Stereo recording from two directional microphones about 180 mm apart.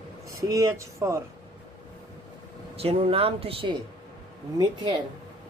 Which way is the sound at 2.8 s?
35° right (ahead or behind).